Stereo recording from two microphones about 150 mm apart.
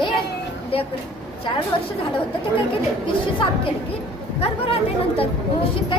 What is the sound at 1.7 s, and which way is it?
Speech, 35° left (ahead or behind).